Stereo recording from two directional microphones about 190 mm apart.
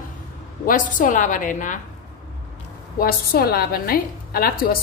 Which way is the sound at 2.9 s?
50° left (ahead or behind).